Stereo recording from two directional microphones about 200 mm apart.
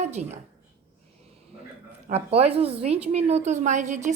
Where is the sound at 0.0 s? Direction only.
35° right (ahead or behind).